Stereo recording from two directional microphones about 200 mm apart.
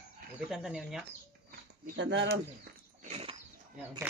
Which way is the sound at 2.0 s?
60° right (ahead or behind).